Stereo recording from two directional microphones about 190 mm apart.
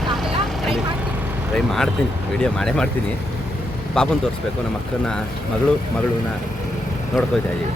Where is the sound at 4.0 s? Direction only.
5° left (ahead or behind).